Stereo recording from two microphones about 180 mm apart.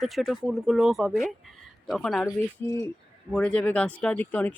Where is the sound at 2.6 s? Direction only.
15° left (ahead or behind).